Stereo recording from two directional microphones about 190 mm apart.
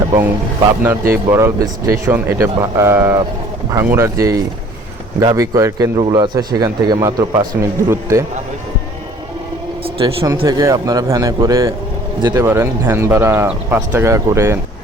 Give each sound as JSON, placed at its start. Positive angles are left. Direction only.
{"t": 0.8, "sound": "a man's voice", "side_deg": -10}
{"t": 10.0, "sound": "a man's voice", "side_deg": -30}
{"t": 10.4, "sound": "speech", "side_deg": -15}